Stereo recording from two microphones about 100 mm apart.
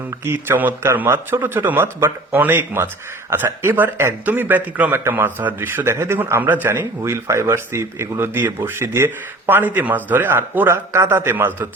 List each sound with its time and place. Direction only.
0.3 s speech: 20° right (ahead or behind)